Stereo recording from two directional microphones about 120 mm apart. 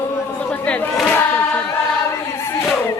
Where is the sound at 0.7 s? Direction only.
10° left (ahead or behind).